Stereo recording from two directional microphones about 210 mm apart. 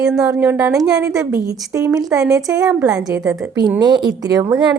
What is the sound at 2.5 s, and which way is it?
Speech, 5° right (ahead or behind).